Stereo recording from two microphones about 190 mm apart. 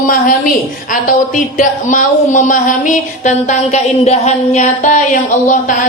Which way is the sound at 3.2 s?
35° left (ahead or behind).